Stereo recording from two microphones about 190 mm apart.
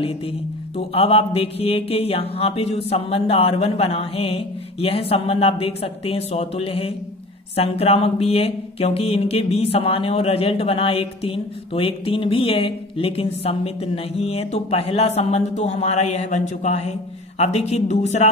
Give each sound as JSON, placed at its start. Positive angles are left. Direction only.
{"t": 0.7, "sound": "speech", "side_deg": 30}